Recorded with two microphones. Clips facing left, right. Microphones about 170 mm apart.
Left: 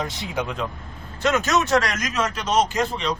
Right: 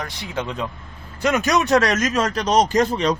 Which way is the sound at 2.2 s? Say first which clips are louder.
Right 1 dB; 40° right (ahead or behind).